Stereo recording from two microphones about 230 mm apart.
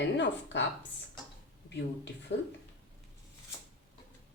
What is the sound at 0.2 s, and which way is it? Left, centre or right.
Speech, left.